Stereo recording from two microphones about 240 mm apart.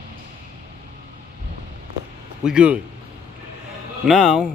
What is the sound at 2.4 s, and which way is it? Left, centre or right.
Speech, centre.